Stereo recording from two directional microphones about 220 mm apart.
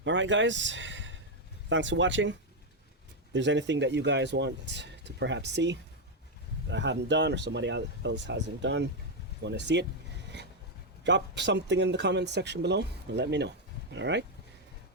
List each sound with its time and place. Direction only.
0.0 s a man's voice: 55° right (ahead or behind)
3.3 s speech: 55° right (ahead or behind)
11.0 s speech: 55° right (ahead or behind)